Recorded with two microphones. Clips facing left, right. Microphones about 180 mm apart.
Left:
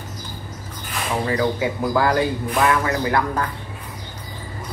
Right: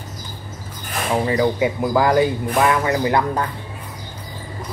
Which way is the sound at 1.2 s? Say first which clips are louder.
Right 2 dB; 20° right (ahead or behind).